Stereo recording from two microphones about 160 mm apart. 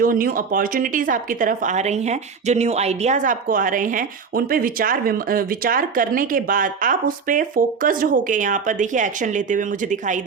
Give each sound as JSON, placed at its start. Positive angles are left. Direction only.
{"t": 0.0, "sound": "speech", "side_deg": -60}